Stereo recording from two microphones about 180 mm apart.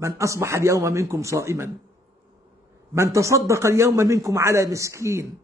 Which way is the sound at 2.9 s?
15° right (ahead or behind).